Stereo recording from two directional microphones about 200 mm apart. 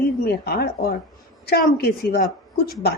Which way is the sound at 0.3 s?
50° left (ahead or behind).